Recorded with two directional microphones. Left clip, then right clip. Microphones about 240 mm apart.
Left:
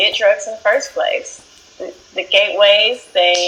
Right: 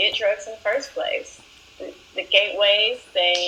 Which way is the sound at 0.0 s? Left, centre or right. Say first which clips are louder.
Left 8 dB; centre.